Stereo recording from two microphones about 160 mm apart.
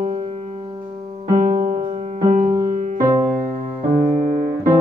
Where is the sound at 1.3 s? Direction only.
50° right (ahead or behind).